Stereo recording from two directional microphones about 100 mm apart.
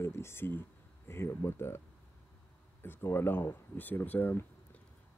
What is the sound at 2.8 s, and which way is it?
Speech, 25° left (ahead or behind).